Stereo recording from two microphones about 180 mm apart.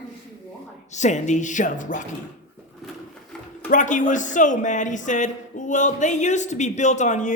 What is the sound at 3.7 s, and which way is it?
Speech, 45° left (ahead or behind).